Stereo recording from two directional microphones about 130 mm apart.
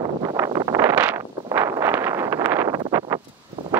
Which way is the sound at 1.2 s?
25° right (ahead or behind).